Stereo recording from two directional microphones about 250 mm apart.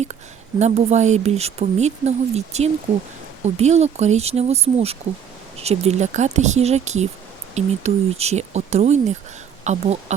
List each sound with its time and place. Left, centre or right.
0.6 s speech: right